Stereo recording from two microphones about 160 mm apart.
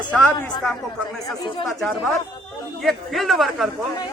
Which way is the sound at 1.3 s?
30° left (ahead or behind).